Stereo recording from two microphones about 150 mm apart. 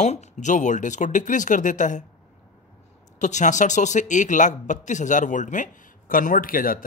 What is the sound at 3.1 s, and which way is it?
Speech, 55° left (ahead or behind).